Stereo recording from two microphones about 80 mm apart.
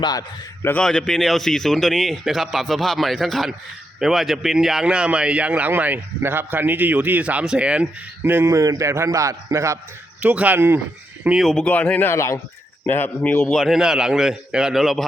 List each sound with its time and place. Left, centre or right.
0.0 s a man's voice: left
0.8 s a man's voice: centre
8.2 s speech: right
8.4 s a man's voice: right
10.2 s speech: centre
11.5 s speech: centre
12.0 s speech: left
12.8 s speech: left
13.4 s speech: centre